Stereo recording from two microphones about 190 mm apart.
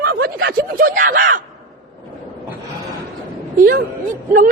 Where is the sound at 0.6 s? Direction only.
45° right (ahead or behind).